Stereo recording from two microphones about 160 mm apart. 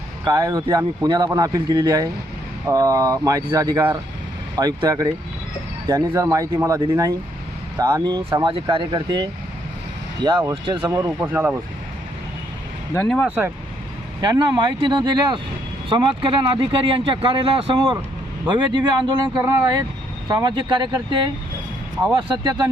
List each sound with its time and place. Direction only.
0.3 s speech: 25° right (ahead or behind)
12.9 s speech: 5° left (ahead or behind)
13.2 s speech: 10° right (ahead or behind)
14.2 s speech: 25° right (ahead or behind)